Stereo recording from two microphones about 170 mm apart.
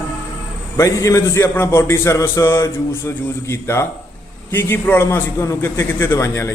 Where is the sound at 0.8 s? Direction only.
20° left (ahead or behind).